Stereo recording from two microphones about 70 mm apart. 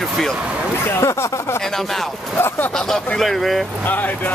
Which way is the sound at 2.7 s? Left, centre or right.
Centre.